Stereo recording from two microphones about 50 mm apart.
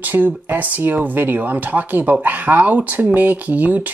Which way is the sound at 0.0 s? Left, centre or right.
Right.